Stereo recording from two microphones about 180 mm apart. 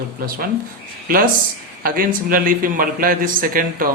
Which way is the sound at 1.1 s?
55° right (ahead or behind).